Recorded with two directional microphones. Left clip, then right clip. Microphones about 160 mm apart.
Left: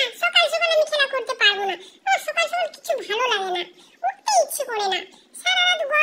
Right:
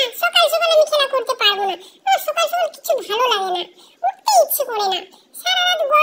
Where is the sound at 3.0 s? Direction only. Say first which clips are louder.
Right 4 dB; 25° left (ahead or behind).